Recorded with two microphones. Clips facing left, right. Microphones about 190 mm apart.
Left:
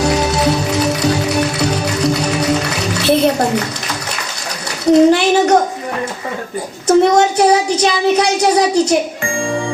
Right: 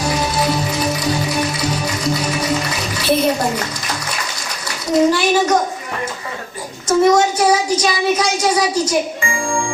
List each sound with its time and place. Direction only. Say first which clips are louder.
0.0 s music: left 4 dB; 70° left (ahead or behind)
4.9 s a sound: left 5 dB; 65° left (ahead or behind)
6.8 s child singing: left 2 dB; 65° left (ahead or behind)